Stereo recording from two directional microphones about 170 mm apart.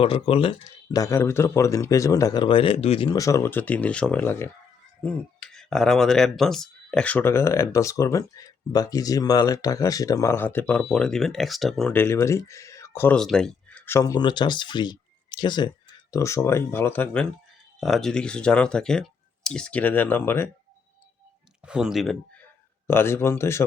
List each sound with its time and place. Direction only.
0.0 s speech: 35° left (ahead or behind)
3.2 s speech: 20° left (ahead or behind)
17.7 s speech: centre (ahead or behind)
21.7 s speech: 5° right (ahead or behind)
22.9 s speech: 15° left (ahead or behind)